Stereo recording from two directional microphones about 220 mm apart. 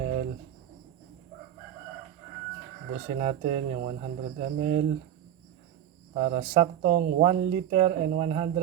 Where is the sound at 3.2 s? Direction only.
30° right (ahead or behind).